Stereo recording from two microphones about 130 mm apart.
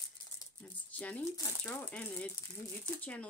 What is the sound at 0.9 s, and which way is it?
Speech, 10° left (ahead or behind).